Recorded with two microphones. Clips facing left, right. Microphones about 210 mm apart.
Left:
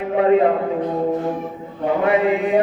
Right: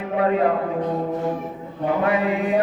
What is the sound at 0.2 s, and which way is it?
Chant, 25° left (ahead or behind).